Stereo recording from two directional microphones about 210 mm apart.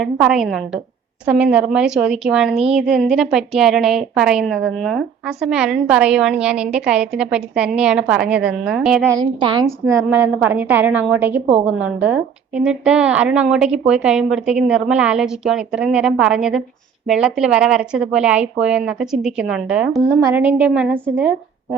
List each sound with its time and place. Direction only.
0.0 s a woman's voice: centre (ahead or behind)
9.1 s a woman's voice: 20° right (ahead or behind)
10.1 s a woman's voice: 10° right (ahead or behind)